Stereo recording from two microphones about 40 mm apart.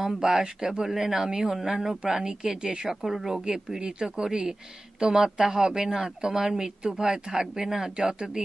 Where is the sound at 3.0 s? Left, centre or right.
Centre.